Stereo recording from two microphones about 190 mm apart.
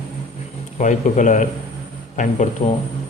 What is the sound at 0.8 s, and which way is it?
A man's voice, 40° left (ahead or behind).